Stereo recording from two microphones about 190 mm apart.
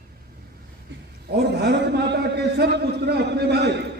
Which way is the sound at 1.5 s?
60° right (ahead or behind).